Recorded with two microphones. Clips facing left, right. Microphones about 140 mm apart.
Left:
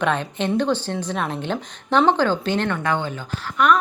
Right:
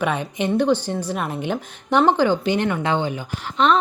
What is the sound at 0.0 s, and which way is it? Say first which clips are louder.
A woman's voice: even; 10° right (ahead or behind).